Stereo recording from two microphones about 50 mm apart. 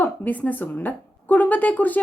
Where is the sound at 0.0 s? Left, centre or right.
Left.